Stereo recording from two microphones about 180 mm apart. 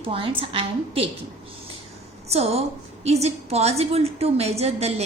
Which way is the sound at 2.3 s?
35° right (ahead or behind).